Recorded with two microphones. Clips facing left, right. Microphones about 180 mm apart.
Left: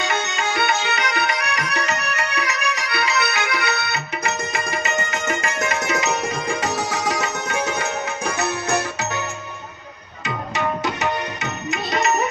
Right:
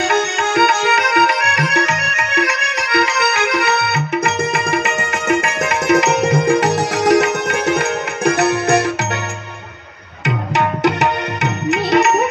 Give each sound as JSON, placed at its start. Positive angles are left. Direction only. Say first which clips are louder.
{"t": 0.0, "sound": "music", "louder": "right 7 dB", "side_deg": -55}
{"t": 5.4, "sound": "tabla", "louder": "right 5 dB", "side_deg": -60}
{"t": 10.2, "sound": "tabla", "louder": "right 6 dB", "side_deg": -65}